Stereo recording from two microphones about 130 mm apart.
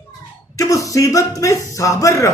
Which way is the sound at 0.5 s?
25° left (ahead or behind).